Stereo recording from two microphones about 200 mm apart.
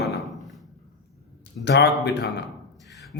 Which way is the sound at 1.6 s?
55° left (ahead or behind).